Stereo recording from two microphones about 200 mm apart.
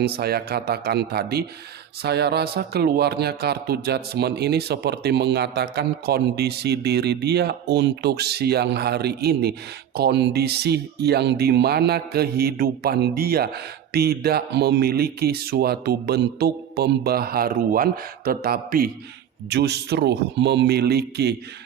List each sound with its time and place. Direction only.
0.0 s speech: 50° right (ahead or behind)